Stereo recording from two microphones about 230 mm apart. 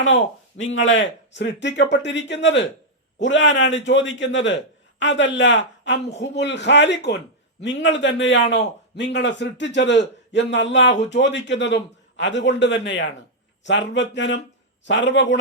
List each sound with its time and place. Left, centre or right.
0.0 s a man's voice: left